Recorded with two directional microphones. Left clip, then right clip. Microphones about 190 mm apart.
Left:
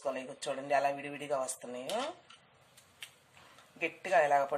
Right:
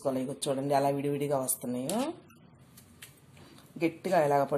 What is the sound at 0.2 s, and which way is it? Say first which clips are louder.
A woman's voice: right 6 dB; 25° right (ahead or behind).